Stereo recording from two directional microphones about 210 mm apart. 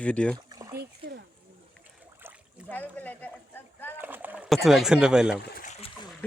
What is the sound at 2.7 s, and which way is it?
Rowboat, 10° left (ahead or behind).